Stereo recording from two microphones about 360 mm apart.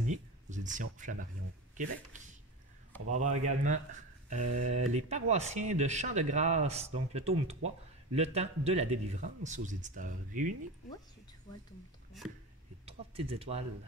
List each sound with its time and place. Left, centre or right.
0.0 s speech: centre
3.1 s speech: right
3.4 s speech: centre
12.8 s speech: centre